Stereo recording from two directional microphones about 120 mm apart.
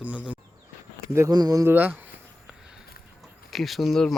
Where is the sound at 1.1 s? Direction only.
30° right (ahead or behind).